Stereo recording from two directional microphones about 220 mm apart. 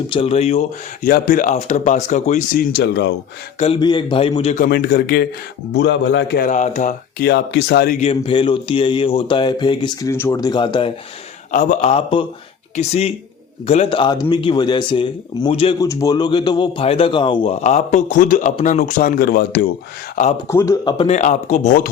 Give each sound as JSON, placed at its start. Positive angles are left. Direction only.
{"t": 0.1, "sound": "speech", "side_deg": 25}
{"t": 1.0, "sound": "a man's voice", "side_deg": 40}
{"t": 2.7, "sound": "speech", "side_deg": 50}
{"t": 3.6, "sound": "speech", "side_deg": 25}
{"t": 4.5, "sound": "speech", "side_deg": 40}
{"t": 5.7, "sound": "speech", "side_deg": 55}
{"t": 7.9, "sound": "speech", "side_deg": 25}
{"t": 11.5, "sound": "a man's voice", "side_deg": 35}
{"t": 20.5, "sound": "speech", "side_deg": 15}
{"t": 21.1, "sound": "a man's voice", "side_deg": 35}